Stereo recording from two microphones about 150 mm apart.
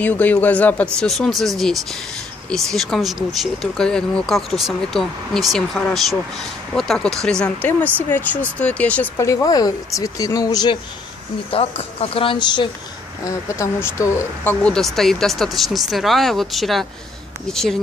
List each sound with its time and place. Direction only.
0.0 s speech: 10° left (ahead or behind)
9.2 s speech: 20° left (ahead or behind)
11.5 s speech: 40° left (ahead or behind)
13.2 s speech: 20° left (ahead or behind)